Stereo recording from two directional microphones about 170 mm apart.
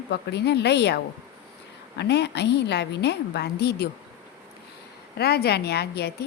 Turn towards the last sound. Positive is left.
turn(degrees=70)  # may be behind; listen again after turning